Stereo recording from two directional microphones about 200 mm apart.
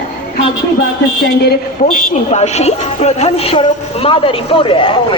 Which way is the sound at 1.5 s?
40° left (ahead or behind).